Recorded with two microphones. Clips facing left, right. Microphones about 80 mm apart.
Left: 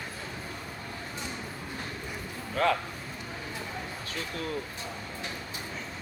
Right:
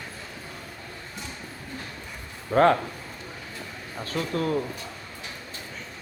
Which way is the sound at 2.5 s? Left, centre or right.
Right.